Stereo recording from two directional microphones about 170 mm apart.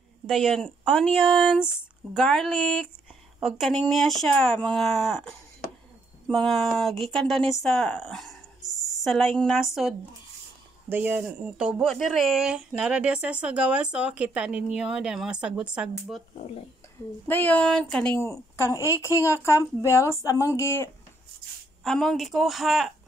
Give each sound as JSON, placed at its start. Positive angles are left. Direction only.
{"t": 0.3, "sound": "speech", "side_deg": 0}
{"t": 10.9, "sound": "speech", "side_deg": -10}
{"t": 17.3, "sound": "a woman's voice", "side_deg": 10}
{"t": 21.8, "sound": "speech", "side_deg": 0}